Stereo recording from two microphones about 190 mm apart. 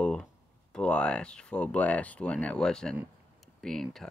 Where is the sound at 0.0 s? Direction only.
5° left (ahead or behind).